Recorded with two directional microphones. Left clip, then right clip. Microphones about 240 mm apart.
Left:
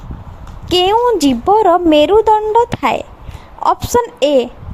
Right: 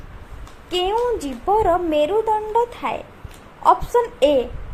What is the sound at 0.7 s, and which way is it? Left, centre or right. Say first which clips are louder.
A woman's voice: left 9 dB; left.